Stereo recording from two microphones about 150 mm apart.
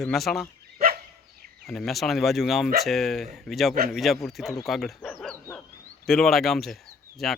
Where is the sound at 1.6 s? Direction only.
5° left (ahead or behind).